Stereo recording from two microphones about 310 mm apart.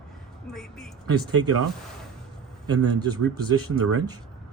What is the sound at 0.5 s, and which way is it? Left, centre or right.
Speech, centre.